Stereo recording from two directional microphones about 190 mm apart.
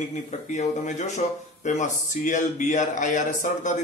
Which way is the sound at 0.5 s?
40° left (ahead or behind).